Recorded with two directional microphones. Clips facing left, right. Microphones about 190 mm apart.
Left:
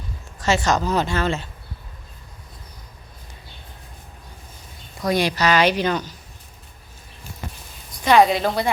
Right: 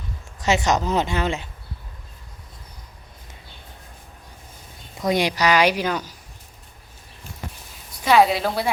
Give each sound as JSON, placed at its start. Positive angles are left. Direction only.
{"t": 0.3, "sound": "speech", "side_deg": -20}
{"t": 4.9, "sound": "speech", "side_deg": -20}
{"t": 8.0, "sound": "a woman's voice", "side_deg": -5}